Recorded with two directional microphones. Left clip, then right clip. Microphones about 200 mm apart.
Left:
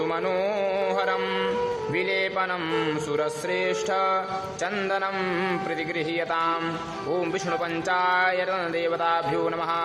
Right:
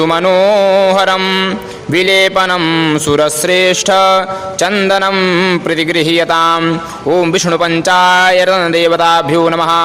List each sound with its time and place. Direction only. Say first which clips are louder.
0.0 s a man's voice: right 16 dB; 45° right (ahead or behind)